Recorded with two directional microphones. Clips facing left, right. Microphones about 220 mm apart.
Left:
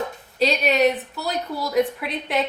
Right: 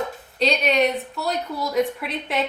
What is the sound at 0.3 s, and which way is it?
A woman's voice, centre (ahead or behind).